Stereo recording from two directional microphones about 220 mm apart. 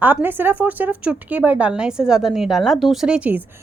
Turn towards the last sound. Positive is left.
turn(degrees=-5)  # may be behind; listen again after turning